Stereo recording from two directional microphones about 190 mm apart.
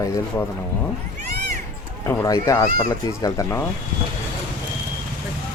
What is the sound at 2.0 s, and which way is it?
Speech, 15° left (ahead or behind).